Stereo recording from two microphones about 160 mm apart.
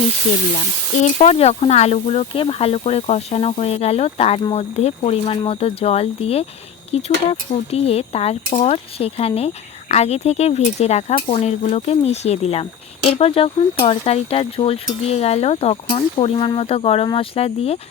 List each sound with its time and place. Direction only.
1.0 s speech: 40° left (ahead or behind)